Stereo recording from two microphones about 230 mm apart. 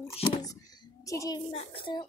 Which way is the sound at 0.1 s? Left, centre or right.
Centre.